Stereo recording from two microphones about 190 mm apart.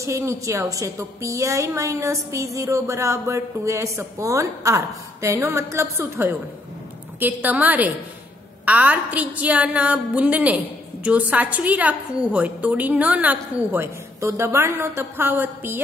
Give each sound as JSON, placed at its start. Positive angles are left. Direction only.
{"t": 0.0, "sound": "a woman's voice", "side_deg": -15}